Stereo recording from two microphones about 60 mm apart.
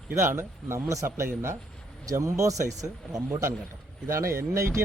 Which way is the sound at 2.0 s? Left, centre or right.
Right.